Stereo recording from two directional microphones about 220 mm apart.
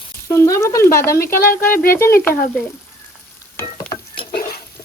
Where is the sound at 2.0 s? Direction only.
10° left (ahead or behind).